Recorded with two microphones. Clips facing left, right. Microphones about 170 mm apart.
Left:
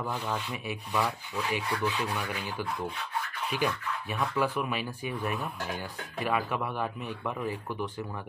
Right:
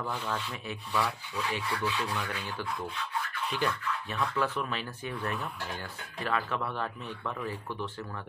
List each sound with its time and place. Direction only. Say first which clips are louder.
0.0 s speech: left 1 dB; 15° left (ahead or behind)